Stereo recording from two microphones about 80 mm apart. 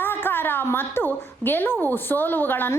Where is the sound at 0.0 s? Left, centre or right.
Left.